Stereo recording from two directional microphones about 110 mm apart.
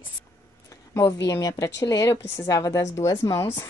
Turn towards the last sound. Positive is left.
turn(degrees=35)  # may be behind; listen again after turning